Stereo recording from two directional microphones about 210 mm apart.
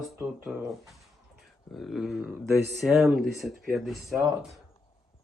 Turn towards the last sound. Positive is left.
turn(degrees=0)  # may be behind; listen again after turning